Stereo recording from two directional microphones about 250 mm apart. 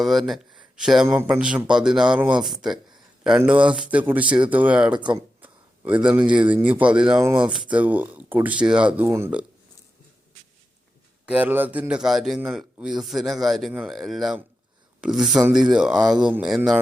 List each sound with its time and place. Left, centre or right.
0.0 s a man's voice: centre
4.9 s speech: centre
5.4 s a sound: centre
6.1 s a man's voice: centre
11.3 s a man's voice: centre